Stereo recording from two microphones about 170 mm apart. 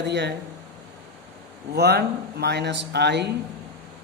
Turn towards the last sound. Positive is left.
turn(degrees=-80)